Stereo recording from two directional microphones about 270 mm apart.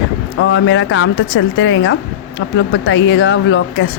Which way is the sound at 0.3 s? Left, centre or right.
Left.